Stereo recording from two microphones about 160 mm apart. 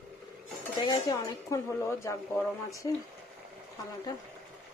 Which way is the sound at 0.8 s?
25° left (ahead or behind).